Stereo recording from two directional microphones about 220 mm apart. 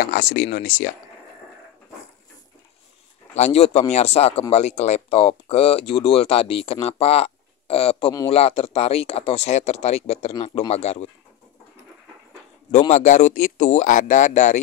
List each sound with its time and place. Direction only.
0.0 s speech: 40° left (ahead or behind)
3.3 s speech: 30° left (ahead or behind)
12.9 s speech: 35° left (ahead or behind)